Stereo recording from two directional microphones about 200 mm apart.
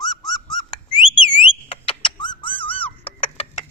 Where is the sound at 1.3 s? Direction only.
25° left (ahead or behind).